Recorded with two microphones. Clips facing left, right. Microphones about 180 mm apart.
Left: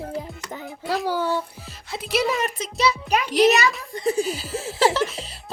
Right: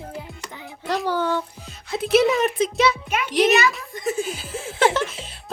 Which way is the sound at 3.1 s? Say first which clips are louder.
Left 5 dB; 35° left (ahead or behind).